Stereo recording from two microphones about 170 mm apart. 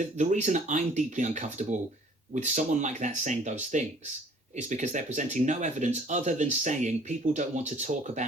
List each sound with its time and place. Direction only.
0.0 s speech: 45° right (ahead or behind)